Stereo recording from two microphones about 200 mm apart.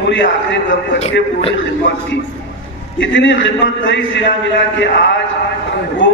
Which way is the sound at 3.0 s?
65° left (ahead or behind).